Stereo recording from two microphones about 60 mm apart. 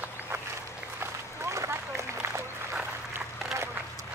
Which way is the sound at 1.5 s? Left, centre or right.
Right.